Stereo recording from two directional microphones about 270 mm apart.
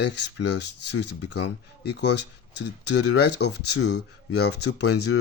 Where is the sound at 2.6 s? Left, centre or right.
Left.